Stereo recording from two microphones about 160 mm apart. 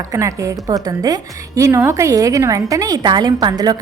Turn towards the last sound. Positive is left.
turn(degrees=-25)  # may be behind; listen again after turning